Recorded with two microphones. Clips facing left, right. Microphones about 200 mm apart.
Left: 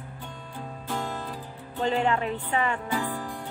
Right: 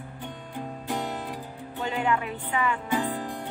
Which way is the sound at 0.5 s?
15° right (ahead or behind).